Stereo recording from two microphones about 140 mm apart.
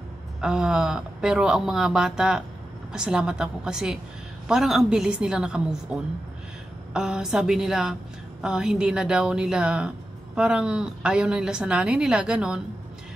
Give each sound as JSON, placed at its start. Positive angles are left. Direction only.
{"t": 0.4, "sound": "a woman's voice", "side_deg": -5}